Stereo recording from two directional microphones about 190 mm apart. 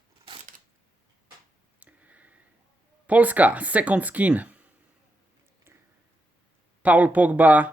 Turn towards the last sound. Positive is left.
turn(degrees=-10)  # may be behind; listen again after turning